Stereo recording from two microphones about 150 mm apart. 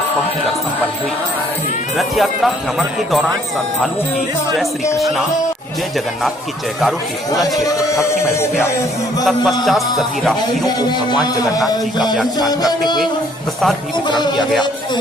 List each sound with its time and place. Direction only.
2.0 s speech: centre (ahead or behind)
4.9 s speech: centre (ahead or behind)
6.8 s speech: centre (ahead or behind)
7.6 s a sound: 20° left (ahead or behind)
8.4 s music: 15° left (ahead or behind)
9.7 s speech: centre (ahead or behind)
10.8 s a sound: 30° left (ahead or behind)
13.9 s speech: 30° left (ahead or behind)